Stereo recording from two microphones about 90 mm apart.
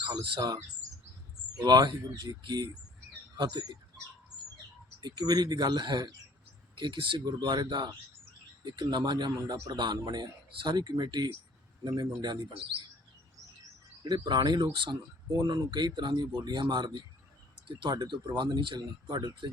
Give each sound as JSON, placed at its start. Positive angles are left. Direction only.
{"t": 0.0, "sound": "speech", "side_deg": -50}
{"t": 4.9, "sound": "speech", "side_deg": -50}
{"t": 6.7, "sound": "speech", "side_deg": -65}
{"t": 7.3, "sound": "speech", "side_deg": -55}
{"t": 14.0, "sound": "speech", "side_deg": -50}